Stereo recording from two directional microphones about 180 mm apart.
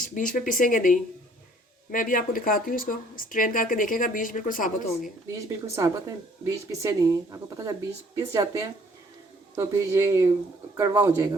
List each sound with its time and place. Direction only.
0.0 s speech: 50° left (ahead or behind)
5.8 s speech: 20° right (ahead or behind)